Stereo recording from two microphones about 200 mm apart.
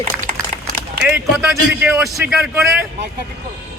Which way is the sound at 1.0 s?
5° right (ahead or behind).